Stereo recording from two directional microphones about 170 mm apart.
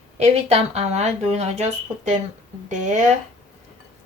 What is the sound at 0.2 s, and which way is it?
Speech, 40° right (ahead or behind).